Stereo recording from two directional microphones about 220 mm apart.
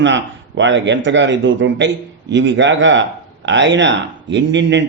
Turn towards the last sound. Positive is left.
turn(degrees=-55)  # may be behind; listen again after turning